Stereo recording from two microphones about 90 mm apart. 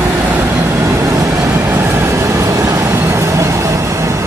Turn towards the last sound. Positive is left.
turn(degrees=-35)  # may be behind; listen again after turning